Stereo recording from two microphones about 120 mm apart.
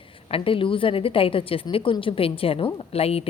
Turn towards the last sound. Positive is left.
turn(degrees=55)  # may be behind; listen again after turning